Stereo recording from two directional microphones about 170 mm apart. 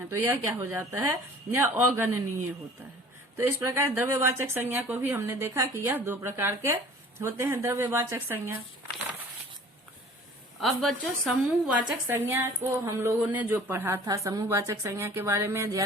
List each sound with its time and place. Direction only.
0.3 s a woman's voice: 15° right (ahead or behind)
3.3 s a woman's voice: 15° right (ahead or behind)
10.6 s a woman's voice: centre (ahead or behind); by 15.8 s 15° right (ahead or behind)